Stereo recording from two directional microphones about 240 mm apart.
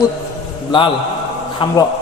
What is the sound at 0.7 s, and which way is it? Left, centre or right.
A man's voice, centre.